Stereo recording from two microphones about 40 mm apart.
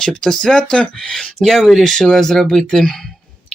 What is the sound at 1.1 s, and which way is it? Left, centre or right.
Speech, centre.